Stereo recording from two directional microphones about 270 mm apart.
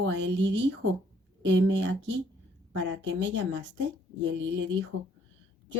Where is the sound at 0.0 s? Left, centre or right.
Right.